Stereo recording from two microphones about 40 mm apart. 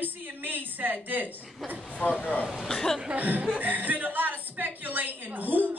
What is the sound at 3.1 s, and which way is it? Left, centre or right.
A woman's voice, right.